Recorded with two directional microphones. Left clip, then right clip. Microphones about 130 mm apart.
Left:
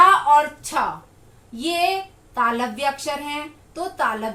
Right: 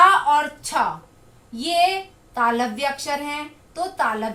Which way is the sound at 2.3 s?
35° right (ahead or behind).